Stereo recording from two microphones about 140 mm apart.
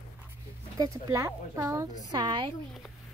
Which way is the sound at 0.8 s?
20° right (ahead or behind).